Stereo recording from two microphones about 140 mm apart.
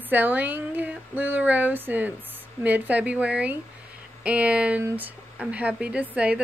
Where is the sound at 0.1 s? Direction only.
10° right (ahead or behind).